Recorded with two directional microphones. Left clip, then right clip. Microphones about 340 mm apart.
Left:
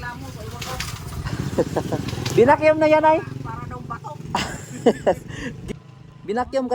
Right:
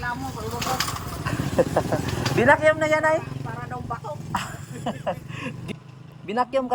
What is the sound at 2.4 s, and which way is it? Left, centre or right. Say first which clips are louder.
Speech: left 2 dB; centre.